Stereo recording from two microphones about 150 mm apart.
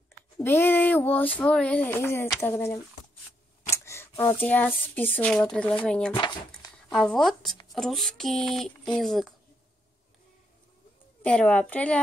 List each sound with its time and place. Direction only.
0.4 s speech: 15° left (ahead or behind)
3.7 s a sound: 20° left (ahead or behind)
4.2 s speech: 15° left (ahead or behind)
6.1 s speech: 30° left (ahead or behind)
6.9 s a sound: centre (ahead or behind)
7.7 s speech: centre (ahead or behind)
11.2 s speech: 10° left (ahead or behind)